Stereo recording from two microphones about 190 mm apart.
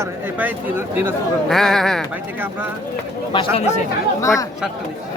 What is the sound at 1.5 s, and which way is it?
Speech, centre (ahead or behind).